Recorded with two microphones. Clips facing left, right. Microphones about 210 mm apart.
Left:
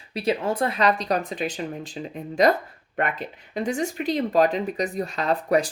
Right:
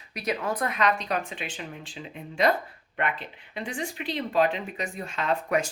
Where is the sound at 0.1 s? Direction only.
30° left (ahead or behind).